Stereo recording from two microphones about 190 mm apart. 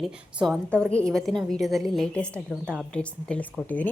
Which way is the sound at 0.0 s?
Centre (ahead or behind).